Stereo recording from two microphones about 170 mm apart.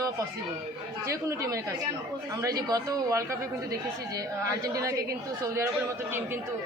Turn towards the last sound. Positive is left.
turn(degrees=-15)  # may be behind; listen again after turning